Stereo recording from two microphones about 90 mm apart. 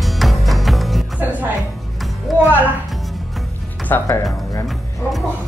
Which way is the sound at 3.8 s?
20° left (ahead or behind).